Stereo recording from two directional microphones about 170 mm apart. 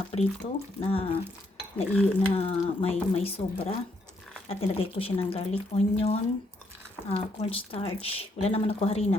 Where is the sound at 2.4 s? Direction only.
35° left (ahead or behind).